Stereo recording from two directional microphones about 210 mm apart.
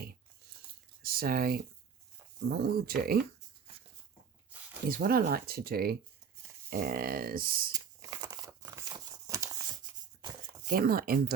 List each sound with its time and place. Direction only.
1.0 s speech: 45° right (ahead or behind)
4.9 s speech: 45° right (ahead or behind)
7.7 s tearing: 20° right (ahead or behind)
10.7 s speech: 45° right (ahead or behind)